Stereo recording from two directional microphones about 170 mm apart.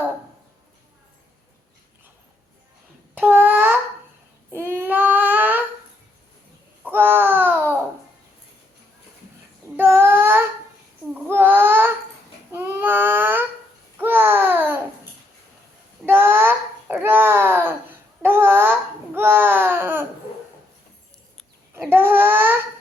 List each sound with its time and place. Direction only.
3.2 s babbling: 10° right (ahead or behind)
4.5 s baby cry: 15° right (ahead or behind)
6.8 s babbling: 10° right (ahead or behind)
9.7 s child singing: 15° right (ahead or behind)
11.1 s babbling: 10° right (ahead or behind)
12.5 s a sound: 15° right (ahead or behind)
14.0 s babbling: 10° right (ahead or behind)
16.0 s babbling: 15° right (ahead or behind)
21.8 s babbling: 10° right (ahead or behind)